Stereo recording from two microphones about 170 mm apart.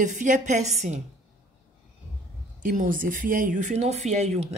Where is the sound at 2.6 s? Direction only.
50° right (ahead or behind).